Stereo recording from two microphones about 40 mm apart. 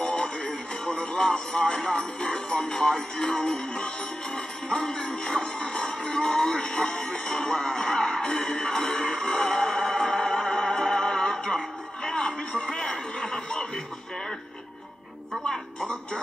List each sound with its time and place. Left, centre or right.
0.0 s speech: centre
4.6 s music: centre
12.7 s speech: centre
15.4 s speech: centre